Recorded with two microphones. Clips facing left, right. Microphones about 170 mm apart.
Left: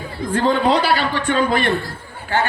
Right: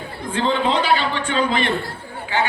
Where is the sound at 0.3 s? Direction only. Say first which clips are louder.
Left 3 dB; 40° left (ahead or behind).